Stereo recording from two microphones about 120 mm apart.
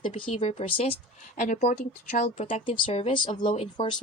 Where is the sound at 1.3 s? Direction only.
90° left; by 2.4 s 75° left (ahead or behind).